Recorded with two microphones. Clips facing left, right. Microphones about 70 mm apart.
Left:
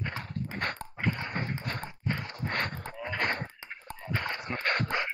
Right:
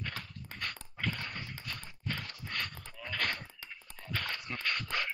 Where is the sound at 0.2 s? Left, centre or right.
Left.